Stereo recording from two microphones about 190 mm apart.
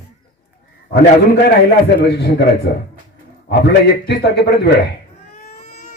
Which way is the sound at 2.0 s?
60° left (ahead or behind).